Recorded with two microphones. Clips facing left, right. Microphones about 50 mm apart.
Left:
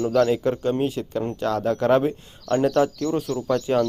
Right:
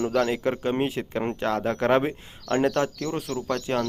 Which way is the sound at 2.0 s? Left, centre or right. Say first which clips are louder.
Left 2 dB; right.